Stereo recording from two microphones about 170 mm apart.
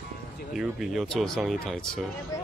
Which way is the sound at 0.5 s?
Centre (ahead or behind).